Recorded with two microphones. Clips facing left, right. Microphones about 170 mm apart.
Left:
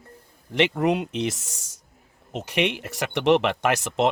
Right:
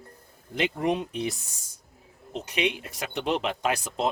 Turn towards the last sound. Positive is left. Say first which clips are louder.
# left 5 dB
turn(degrees=85)